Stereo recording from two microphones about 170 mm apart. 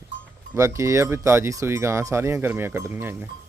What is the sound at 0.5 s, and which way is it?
Speech, 15° right (ahead or behind).